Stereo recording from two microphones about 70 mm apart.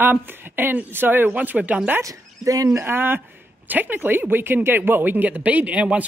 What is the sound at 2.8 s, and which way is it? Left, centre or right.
Speech, right.